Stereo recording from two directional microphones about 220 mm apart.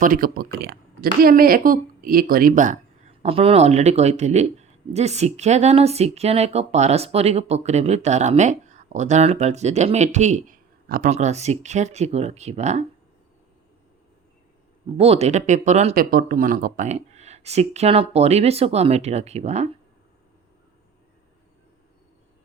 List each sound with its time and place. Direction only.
0.0 s speech: 40° right (ahead or behind)
14.9 s speech: 25° right (ahead or behind)